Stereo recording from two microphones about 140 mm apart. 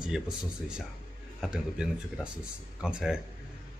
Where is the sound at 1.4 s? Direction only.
5° right (ahead or behind).